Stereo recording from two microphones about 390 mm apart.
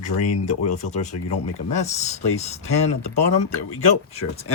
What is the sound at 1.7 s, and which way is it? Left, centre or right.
Speech, centre.